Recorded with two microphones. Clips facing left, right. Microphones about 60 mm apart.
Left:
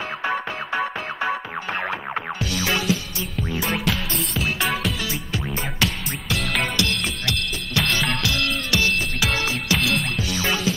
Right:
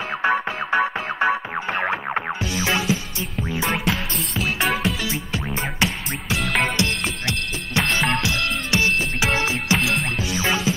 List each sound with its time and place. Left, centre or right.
0.2 s music: right
3.7 s music: centre
5.8 s music: right
6.4 s music: centre
6.8 s drum kit: right
8.7 s music: right
10.3 s music: centre